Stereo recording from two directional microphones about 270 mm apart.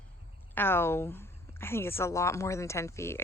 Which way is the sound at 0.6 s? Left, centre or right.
Centre.